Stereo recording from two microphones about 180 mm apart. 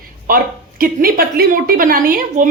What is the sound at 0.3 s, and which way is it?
A woman's voice, 50° right (ahead or behind).